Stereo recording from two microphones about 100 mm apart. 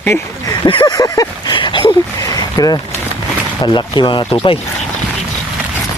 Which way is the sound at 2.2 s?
35° left (ahead or behind).